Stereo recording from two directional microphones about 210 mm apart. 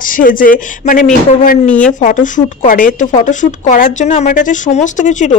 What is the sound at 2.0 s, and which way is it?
Speech, 35° left (ahead or behind).